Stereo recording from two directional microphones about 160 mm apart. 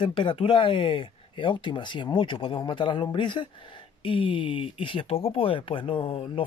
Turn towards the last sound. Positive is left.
turn(degrees=30)  # may be behind; listen again after turning